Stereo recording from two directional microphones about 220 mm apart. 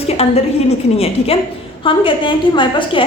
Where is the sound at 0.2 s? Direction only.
30° left (ahead or behind).